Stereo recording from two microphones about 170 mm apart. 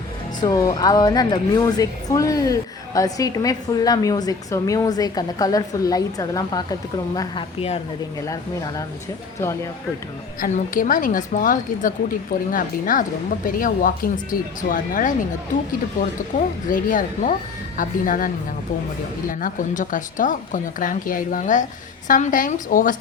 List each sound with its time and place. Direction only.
0.4 s a woman's voice: 25° left (ahead or behind)
8.2 s a woman's voice: 20° left (ahead or behind)
10.4 s speech: 50° left (ahead or behind)
16.3 s speech: 50° left (ahead or behind)
19.3 s speech: 55° left (ahead or behind)